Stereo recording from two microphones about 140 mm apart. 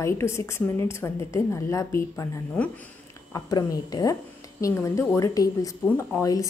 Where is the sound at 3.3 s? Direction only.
30° left (ahead or behind).